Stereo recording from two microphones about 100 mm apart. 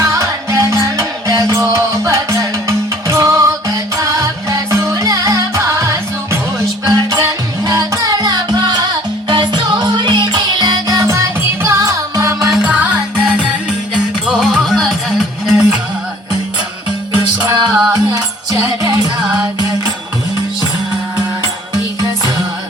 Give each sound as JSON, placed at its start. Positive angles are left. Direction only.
{"t": 0.0, "sound": "music", "side_deg": -30}
{"t": 12.5, "sound": "music", "side_deg": -10}
{"t": 17.4, "sound": "music", "side_deg": -40}